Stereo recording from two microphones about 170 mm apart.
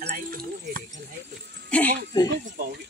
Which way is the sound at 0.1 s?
55° right (ahead or behind).